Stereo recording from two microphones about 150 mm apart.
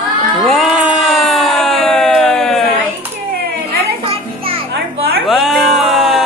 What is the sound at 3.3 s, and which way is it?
Children playing, 90° right.